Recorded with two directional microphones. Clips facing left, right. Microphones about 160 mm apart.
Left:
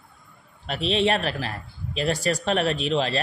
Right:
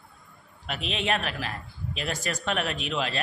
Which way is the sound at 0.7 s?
35° left (ahead or behind).